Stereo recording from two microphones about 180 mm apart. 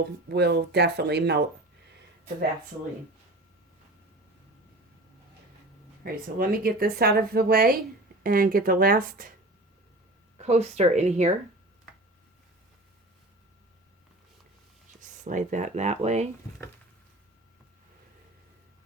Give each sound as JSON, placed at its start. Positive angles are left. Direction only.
{"t": 0.0, "sound": "speech", "side_deg": -65}
{"t": 6.0, "sound": "speech", "side_deg": -55}
{"t": 10.3, "sound": "speech", "side_deg": -35}
{"t": 15.2, "sound": "speech", "side_deg": -45}